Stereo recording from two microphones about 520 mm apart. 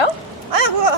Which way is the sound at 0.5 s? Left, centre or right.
Right.